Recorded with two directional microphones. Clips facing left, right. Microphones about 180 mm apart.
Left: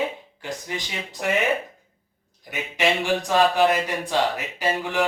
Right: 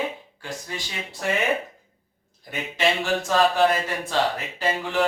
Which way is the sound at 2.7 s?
15° left (ahead or behind).